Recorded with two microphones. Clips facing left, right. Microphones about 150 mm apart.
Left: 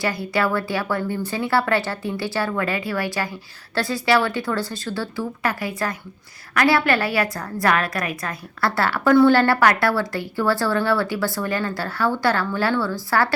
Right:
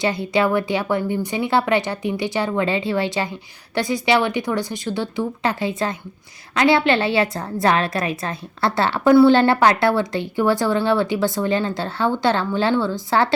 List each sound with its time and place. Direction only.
0.0 s a woman's voice: 20° right (ahead or behind)